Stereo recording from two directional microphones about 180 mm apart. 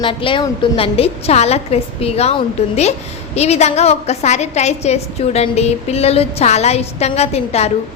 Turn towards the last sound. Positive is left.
turn(degrees=35)  # may be behind; listen again after turning